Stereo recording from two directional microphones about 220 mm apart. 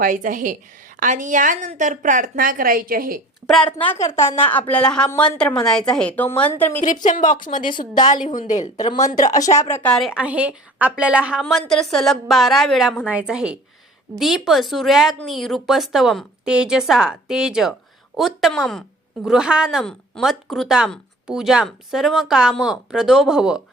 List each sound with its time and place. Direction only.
0.0 s a woman's voice: 40° right (ahead or behind)
3.4 s a woman's voice: centre (ahead or behind)
6.8 s a woman's voice: 35° left (ahead or behind)
7.6 s a woman's voice: 20° left (ahead or behind)
8.1 s a woman's voice: 35° left (ahead or behind)
9.3 s a woman's voice: 15° left (ahead or behind); by 23.6 s 5° right (ahead or behind)